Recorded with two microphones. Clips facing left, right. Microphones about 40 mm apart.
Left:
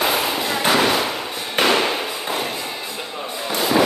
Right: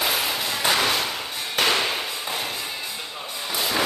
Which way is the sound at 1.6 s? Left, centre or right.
Centre.